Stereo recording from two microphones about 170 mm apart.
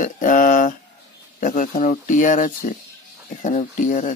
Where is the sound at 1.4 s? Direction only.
50° left (ahead or behind).